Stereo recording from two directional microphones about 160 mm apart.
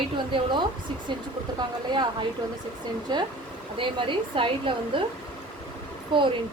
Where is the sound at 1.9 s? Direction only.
30° right (ahead or behind).